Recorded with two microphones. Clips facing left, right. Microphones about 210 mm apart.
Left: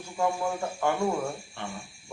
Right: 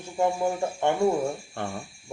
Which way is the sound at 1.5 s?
45° right (ahead or behind).